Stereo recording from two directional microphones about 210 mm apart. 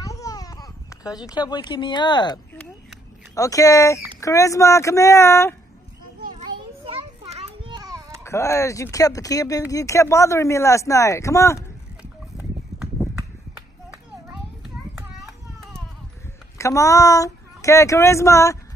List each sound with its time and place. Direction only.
0.0 s a sound: 15° left (ahead or behind)
1.2 s speech: 20° left (ahead or behind)
7.2 s children playing: 25° right (ahead or behind)
8.2 s speech: 15° left (ahead or behind)
12.0 s a sound: 5° right (ahead or behind)
15.0 s children playing: centre (ahead or behind)
16.5 s speech: 15° left (ahead or behind)